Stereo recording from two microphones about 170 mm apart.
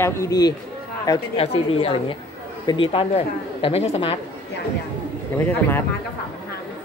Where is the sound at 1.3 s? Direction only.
35° left (ahead or behind).